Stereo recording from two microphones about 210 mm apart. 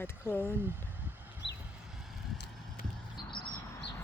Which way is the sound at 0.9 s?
10° right (ahead or behind).